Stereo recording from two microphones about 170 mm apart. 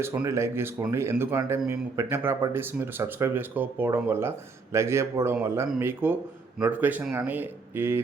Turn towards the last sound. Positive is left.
turn(degrees=-15)  # may be behind; listen again after turning